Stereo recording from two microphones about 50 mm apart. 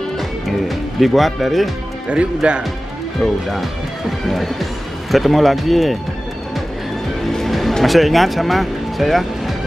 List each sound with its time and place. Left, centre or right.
0.5 s speech: centre
2.0 s speech: right
3.2 s speech: centre
7.2 s speech: centre